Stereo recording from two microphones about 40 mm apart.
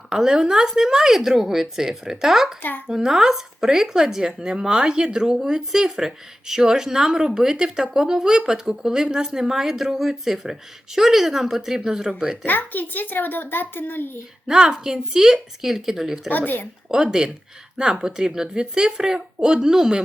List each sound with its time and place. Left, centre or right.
0.1 s speech: centre
2.6 s speech: left
2.8 s speech: centre
12.5 s a child's voice: left
14.4 s speech: centre